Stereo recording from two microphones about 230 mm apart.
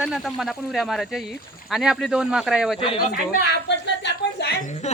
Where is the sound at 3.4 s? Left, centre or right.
Left.